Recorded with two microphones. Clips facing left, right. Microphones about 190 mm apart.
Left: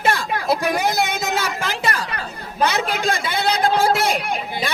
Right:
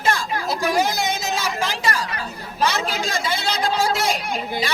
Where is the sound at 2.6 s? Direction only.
60° left (ahead or behind).